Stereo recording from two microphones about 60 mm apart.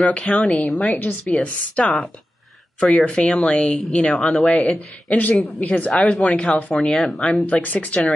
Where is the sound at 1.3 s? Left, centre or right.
Centre.